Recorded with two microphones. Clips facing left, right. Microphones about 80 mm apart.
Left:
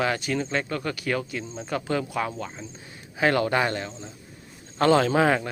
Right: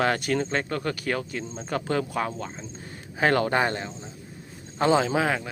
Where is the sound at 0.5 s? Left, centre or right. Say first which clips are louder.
Even; right.